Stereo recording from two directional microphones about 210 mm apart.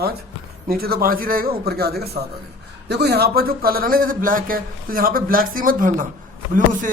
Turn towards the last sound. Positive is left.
turn(degrees=-40)  # may be behind; listen again after turning